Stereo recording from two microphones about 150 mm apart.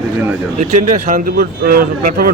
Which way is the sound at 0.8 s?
60° right (ahead or behind).